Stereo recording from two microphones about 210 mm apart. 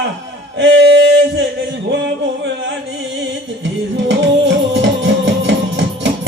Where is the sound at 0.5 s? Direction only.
60° right (ahead or behind).